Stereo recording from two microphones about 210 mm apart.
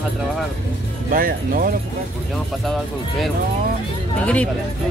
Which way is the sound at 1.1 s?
45° right (ahead or behind).